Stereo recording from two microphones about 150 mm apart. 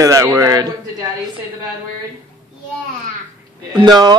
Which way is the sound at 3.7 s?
30° right (ahead or behind).